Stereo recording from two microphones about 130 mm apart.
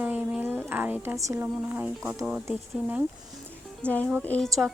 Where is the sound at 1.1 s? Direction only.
20° right (ahead or behind).